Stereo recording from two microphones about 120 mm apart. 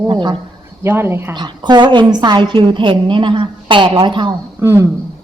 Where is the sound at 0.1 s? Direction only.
40° right (ahead or behind).